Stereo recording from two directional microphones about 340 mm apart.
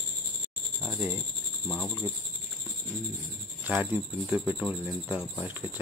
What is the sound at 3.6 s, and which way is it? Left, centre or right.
Speech, centre.